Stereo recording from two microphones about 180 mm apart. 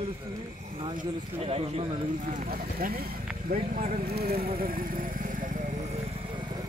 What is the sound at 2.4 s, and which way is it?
Speech, 55° right (ahead or behind).